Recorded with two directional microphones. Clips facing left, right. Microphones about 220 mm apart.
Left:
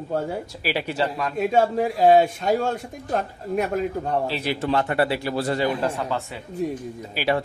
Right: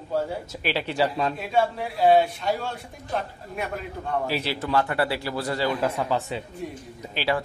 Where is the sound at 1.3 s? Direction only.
45° left (ahead or behind).